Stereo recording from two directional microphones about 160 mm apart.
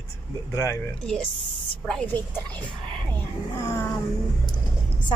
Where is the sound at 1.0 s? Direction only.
5° left (ahead or behind).